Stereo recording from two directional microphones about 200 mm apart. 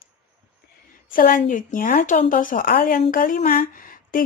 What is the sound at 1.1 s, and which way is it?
Speech, 45° left (ahead or behind).